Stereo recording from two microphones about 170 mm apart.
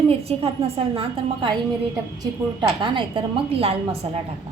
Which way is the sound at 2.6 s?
30° right (ahead or behind).